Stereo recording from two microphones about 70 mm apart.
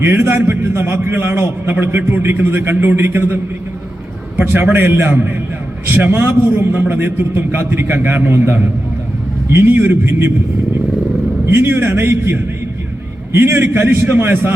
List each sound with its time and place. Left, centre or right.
0.0 s a man's voice: right
4.4 s a man's voice: right
11.4 s a man's voice: right